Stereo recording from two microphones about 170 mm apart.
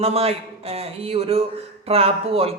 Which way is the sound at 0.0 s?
35° right (ahead or behind).